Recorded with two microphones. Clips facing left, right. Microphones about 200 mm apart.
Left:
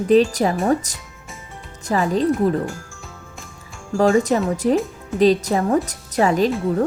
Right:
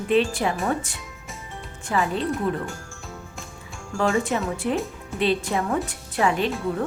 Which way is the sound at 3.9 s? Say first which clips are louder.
Left 7 dB; 35° left (ahead or behind).